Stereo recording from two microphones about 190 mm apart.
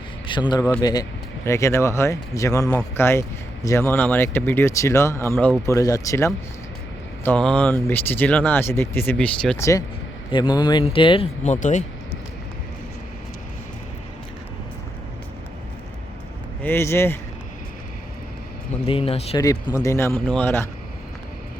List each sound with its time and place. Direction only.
0.3 s a man's voice: 25° left (ahead or behind); by 9.6 s 5° left (ahead or behind)
9.6 s speech: 15° left (ahead or behind)
11.4 s speech: 40° left (ahead or behind)
16.6 s speech: 15° left (ahead or behind)
18.9 s speech: 30° left (ahead or behind)
19.4 s speech: 20° left (ahead or behind)